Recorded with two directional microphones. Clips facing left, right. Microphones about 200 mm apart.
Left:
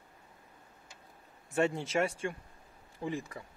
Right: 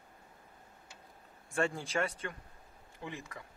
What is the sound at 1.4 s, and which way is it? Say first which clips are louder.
Speech: left 4 dB; 25° left (ahead or behind).